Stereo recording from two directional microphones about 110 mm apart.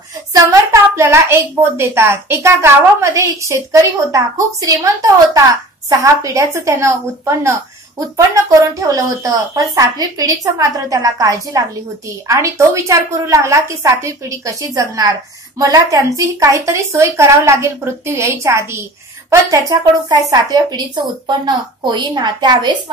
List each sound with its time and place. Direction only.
0.3 s a child's voice: 30° right (ahead or behind)